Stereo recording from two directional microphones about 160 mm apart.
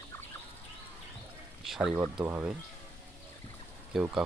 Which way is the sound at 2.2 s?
15° right (ahead or behind).